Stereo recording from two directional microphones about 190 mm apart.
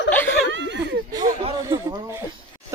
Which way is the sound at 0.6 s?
70° right (ahead or behind).